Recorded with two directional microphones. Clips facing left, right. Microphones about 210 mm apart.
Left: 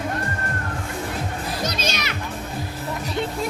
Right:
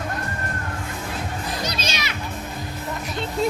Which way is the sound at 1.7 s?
50° left (ahead or behind).